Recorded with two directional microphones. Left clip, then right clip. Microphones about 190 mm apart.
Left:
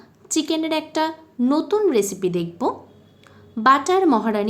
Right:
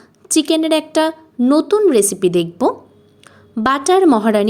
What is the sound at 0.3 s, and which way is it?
A woman's voice, 35° right (ahead or behind).